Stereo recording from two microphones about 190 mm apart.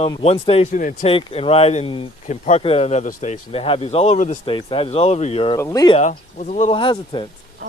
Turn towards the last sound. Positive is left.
turn(degrees=25)  # may be behind; listen again after turning